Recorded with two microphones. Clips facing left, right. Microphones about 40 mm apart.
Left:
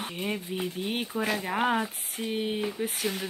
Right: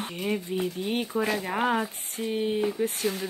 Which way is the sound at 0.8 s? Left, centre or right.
Centre.